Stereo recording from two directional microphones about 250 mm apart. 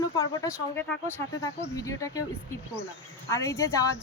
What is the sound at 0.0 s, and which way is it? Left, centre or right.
Speech, centre.